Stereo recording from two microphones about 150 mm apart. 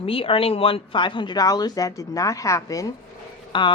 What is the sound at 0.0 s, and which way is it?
Speech, 40° left (ahead or behind).